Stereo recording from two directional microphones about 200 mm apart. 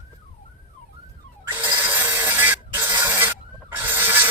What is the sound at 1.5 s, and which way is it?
Printer, 15° right (ahead or behind).